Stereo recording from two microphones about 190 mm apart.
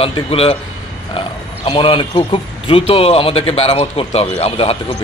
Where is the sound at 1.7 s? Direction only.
25° left (ahead or behind).